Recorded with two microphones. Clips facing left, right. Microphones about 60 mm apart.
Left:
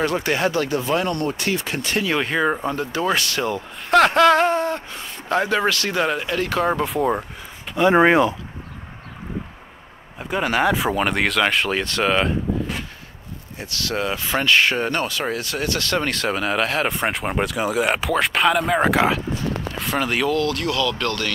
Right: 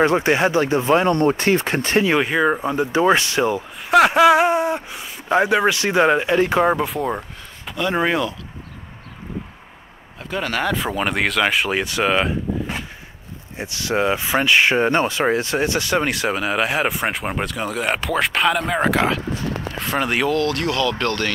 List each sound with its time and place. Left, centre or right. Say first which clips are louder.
0.0 s speech: right 4 dB; right
2.1 s speech: right 3 dB; centre
3.8 s speech: right 1 dB; centre
6.8 s speech: left 2 dB; centre
7.7 s speech: left 6 dB; left
10.1 s speech: left 3 dB; centre
13.6 s speech: right 4 dB; centre